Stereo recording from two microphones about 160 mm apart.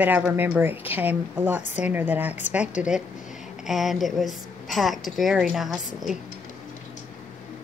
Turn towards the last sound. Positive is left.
turn(degrees=0)  # may be behind; listen again after turning